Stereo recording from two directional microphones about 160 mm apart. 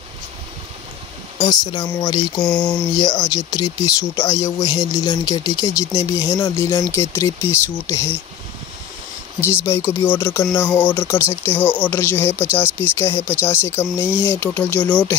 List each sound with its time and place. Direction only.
1.4 s speech: 25° left (ahead or behind)
2.4 s a sound: 5° left (ahead or behind)
3.0 s speech: 25° left (ahead or behind)
9.7 s speech: 15° left (ahead or behind)
13.8 s speech: 10° right (ahead or behind)
14.2 s speech: 10° left (ahead or behind)